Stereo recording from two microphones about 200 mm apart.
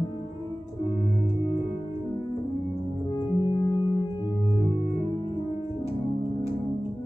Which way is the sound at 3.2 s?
25° left (ahead or behind).